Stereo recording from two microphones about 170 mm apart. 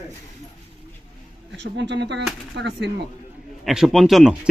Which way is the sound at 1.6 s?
90° right.